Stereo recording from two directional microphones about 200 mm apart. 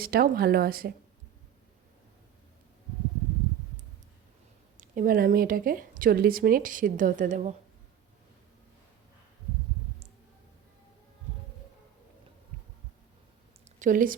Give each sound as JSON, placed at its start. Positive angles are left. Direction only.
{"t": 0.0, "sound": "speech", "side_deg": -50}
{"t": 4.8, "sound": "speech", "side_deg": -45}
{"t": 13.7, "sound": "speech", "side_deg": -40}